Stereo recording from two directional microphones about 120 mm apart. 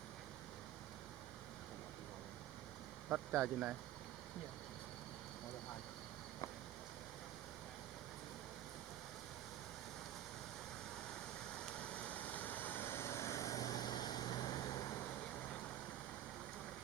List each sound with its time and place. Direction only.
3.3 s speech: centre (ahead or behind)
11.8 s vehicle: 10° left (ahead or behind); by 14.5 s 35° left (ahead or behind)